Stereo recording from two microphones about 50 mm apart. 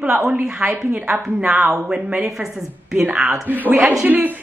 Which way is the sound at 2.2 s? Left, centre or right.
Centre.